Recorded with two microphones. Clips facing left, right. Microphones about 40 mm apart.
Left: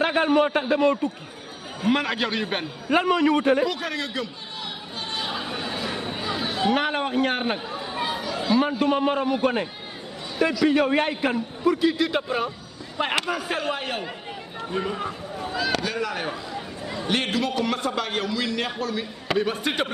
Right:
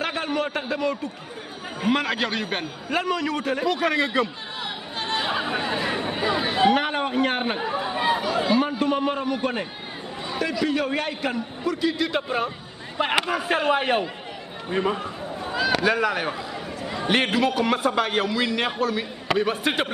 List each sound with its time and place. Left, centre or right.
0.0 s a man's voice: left
1.9 s a man's voice: centre
2.9 s a man's voice: left
3.6 s a man's voice: centre
5.1 s chatter: right
6.7 s a man's voice: centre
7.6 s chatter: right
8.5 s a man's voice: centre
10.7 s a man's voice: centre
12.0 s a man's voice: centre
13.1 s a man's voice: centre